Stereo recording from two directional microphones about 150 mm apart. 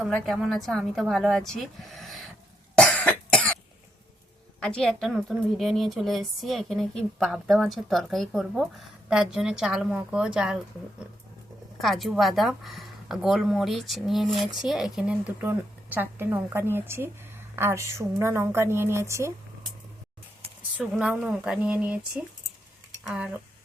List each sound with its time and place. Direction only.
0.0 s a woman's voice: centre (ahead or behind)
2.7 s cough: 5° left (ahead or behind)
4.6 s a woman's voice: 5° left (ahead or behind)
11.8 s a woman's voice: centre (ahead or behind); by 19.3 s 20° right (ahead or behind)
20.9 s a woman's voice: 5° right (ahead or behind)